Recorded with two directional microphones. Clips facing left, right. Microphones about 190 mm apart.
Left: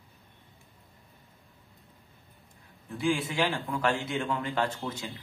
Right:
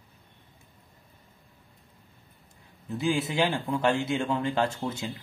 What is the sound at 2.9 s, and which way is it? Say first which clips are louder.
A man's voice: right 2 dB; 20° right (ahead or behind).